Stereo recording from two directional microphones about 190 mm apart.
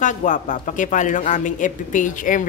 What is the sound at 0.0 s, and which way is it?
Speech, 40° left (ahead or behind).